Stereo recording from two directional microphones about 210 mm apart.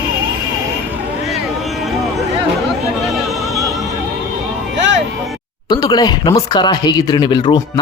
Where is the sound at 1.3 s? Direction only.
Centre (ahead or behind).